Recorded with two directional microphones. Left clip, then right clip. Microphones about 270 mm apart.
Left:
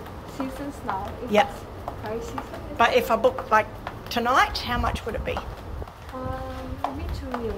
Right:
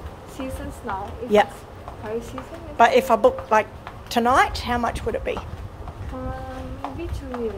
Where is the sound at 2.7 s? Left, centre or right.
Right.